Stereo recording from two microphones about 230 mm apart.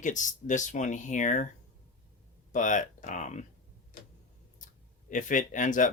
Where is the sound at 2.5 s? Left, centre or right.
Left.